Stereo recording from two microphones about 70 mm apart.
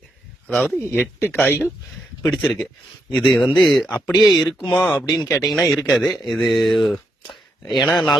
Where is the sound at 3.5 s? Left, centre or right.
Centre.